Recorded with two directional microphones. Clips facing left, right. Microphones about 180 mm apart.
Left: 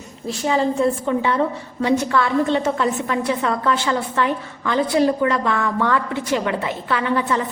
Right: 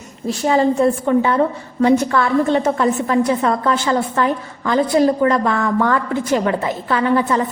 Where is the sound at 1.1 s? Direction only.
55° right (ahead or behind).